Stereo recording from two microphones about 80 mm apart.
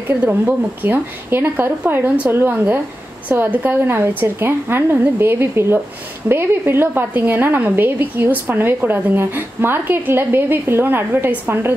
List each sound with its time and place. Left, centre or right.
0.1 s a woman's voice: right